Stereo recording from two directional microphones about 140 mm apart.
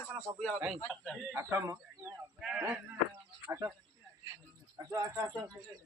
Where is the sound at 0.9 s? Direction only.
5° left (ahead or behind).